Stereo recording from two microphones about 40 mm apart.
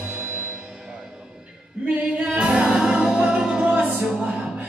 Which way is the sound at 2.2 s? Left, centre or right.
Right.